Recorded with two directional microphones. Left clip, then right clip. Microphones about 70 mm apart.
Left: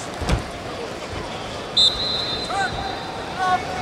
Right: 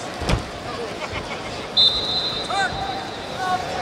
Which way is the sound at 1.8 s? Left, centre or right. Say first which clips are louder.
Even; left.